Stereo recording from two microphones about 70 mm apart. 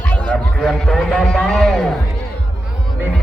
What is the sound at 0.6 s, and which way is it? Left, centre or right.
Music, centre.